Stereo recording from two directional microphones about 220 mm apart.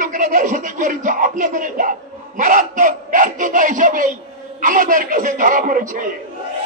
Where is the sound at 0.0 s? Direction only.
35° right (ahead or behind).